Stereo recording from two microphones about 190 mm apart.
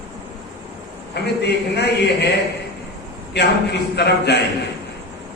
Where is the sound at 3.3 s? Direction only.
60° left (ahead or behind).